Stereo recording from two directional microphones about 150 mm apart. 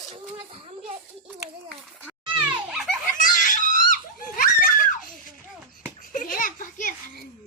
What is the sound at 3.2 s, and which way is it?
Crying, 60° left (ahead or behind).